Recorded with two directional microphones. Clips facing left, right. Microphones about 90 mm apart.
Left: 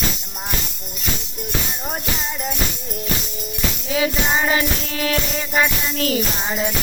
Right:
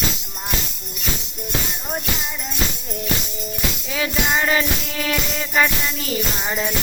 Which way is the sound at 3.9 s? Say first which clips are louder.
Left 2 dB; 15° left (ahead or behind).